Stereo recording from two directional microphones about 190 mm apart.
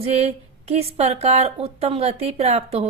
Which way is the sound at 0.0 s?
35° right (ahead or behind).